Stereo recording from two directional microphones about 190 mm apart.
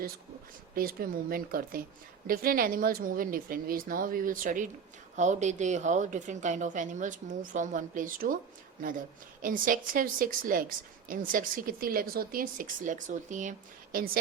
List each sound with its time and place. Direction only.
0.8 s a woman's voice: 50° right (ahead or behind)